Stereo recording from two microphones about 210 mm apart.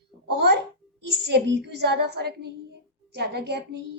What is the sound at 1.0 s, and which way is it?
A woman's voice, 55° right (ahead or behind).